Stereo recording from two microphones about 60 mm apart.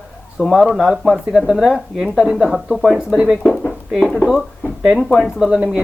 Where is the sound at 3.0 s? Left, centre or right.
Centre.